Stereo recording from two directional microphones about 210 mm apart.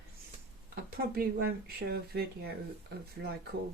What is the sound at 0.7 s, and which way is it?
Speech, 45° right (ahead or behind).